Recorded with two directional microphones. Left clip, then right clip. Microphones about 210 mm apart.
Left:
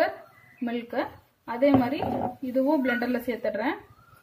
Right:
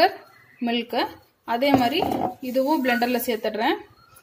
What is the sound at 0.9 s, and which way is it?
A woman's voice, 45° right (ahead or behind).